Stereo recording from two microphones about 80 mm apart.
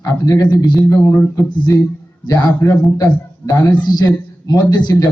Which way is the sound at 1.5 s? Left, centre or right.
Left.